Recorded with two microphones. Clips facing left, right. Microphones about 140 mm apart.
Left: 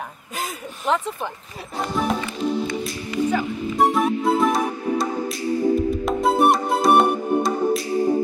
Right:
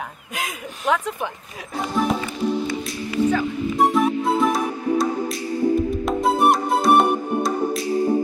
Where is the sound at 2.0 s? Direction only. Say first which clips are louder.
Right 2 dB; centre (ahead or behind).